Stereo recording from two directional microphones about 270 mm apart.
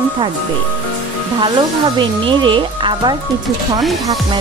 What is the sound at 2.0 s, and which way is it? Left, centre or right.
Speech, centre.